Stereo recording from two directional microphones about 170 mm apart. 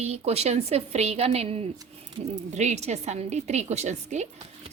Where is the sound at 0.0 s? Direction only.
40° right (ahead or behind).